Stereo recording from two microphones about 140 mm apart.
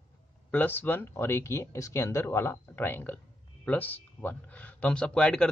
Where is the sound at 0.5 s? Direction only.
15° left (ahead or behind).